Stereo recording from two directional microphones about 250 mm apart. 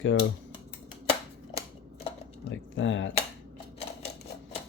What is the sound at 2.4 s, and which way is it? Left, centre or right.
Speech, left.